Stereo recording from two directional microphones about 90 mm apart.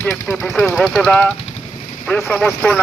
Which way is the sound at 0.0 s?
25° left (ahead or behind).